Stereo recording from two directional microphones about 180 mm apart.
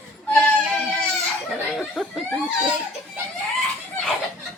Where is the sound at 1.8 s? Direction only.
Centre (ahead or behind).